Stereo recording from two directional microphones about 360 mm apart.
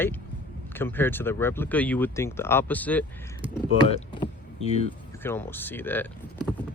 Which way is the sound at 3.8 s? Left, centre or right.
Centre.